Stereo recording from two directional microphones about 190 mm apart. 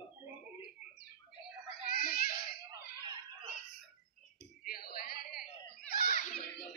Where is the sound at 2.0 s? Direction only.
50° left (ahead or behind).